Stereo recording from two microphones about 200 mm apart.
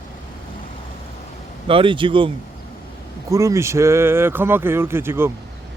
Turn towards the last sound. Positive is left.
turn(degrees=-10)  # may be behind; listen again after turning